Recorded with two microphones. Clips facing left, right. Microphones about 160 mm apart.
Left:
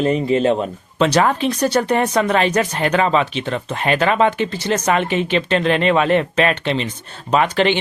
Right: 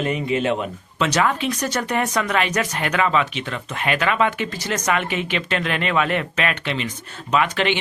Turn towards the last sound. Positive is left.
turn(degrees=35)  # may be behind; listen again after turning